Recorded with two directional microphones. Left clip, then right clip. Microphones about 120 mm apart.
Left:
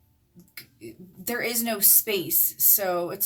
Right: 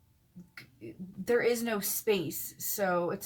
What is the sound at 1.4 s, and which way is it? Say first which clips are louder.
Speech: left 4 dB; 25° left (ahead or behind).